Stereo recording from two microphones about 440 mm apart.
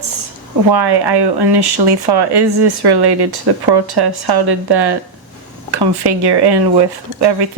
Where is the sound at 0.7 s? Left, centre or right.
Right.